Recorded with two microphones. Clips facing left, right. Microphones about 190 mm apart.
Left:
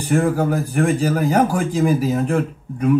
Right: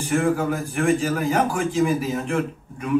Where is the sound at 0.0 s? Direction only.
40° left (ahead or behind).